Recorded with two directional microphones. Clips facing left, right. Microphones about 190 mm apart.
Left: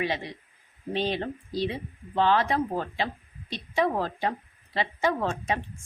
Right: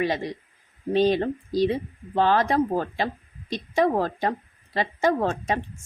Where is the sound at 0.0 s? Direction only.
45° right (ahead or behind).